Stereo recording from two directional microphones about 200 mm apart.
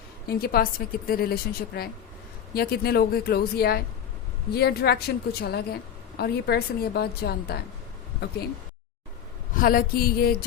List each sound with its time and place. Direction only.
0.3 s a woman's voice: 50° left (ahead or behind)
9.6 s a woman's voice: 45° left (ahead or behind)